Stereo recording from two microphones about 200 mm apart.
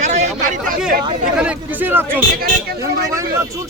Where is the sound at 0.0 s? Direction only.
35° right (ahead or behind).